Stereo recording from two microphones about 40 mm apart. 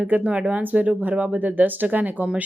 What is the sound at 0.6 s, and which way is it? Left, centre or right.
Speech, right.